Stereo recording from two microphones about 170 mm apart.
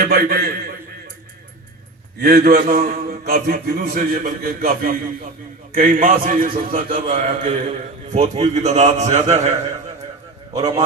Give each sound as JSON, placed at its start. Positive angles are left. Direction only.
{"t": 0.0, "sound": "a man's voice", "side_deg": -60}
{"t": 2.1, "sound": "a man's voice", "side_deg": -60}
{"t": 6.9, "sound": "a man's voice", "side_deg": -40}